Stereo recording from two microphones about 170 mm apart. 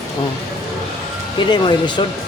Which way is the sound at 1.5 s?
25° left (ahead or behind).